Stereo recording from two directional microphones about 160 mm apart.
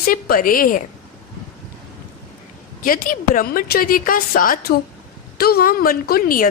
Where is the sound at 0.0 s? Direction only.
65° left (ahead or behind).